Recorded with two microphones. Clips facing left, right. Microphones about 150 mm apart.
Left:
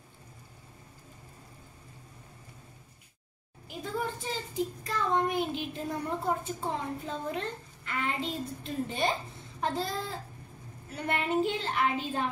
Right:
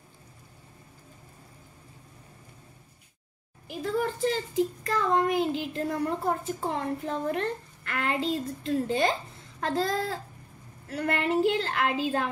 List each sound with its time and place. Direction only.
3.6 s a child's voice: 85° right